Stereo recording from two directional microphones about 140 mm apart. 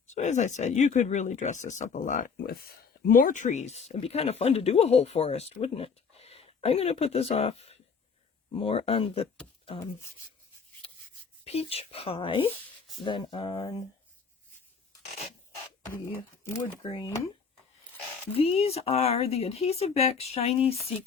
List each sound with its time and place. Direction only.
0.1 s speech: 60° left (ahead or behind)
11.4 s speech: 45° left (ahead or behind); by 13.8 s 30° left (ahead or behind)
16.4 s speech: 20° left (ahead or behind)
16.8 s speech: 35° left (ahead or behind)
18.3 s speech: 45° left (ahead or behind)